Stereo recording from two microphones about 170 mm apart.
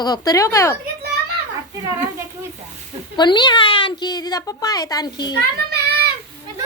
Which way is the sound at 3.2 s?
25° left (ahead or behind).